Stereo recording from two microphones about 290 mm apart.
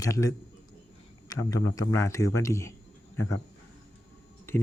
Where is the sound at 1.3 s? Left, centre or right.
Centre.